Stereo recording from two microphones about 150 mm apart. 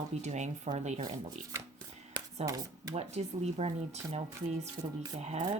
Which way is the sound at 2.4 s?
25° right (ahead or behind).